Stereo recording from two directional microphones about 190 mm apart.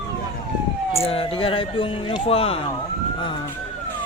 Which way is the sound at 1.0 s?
30° left (ahead or behind).